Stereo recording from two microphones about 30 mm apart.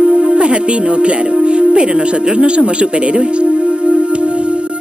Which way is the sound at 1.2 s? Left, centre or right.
Right.